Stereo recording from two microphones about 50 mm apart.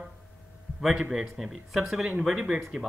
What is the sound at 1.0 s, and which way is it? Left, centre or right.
Speech, centre.